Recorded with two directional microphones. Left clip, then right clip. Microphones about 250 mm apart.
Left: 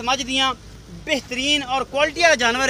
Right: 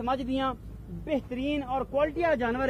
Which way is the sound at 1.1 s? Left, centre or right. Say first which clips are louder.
Left 10 dB; centre.